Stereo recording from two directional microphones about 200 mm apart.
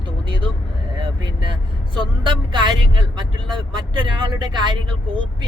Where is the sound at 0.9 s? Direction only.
25° right (ahead or behind).